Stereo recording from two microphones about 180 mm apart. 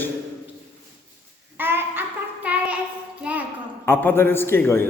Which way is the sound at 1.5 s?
10° right (ahead or behind).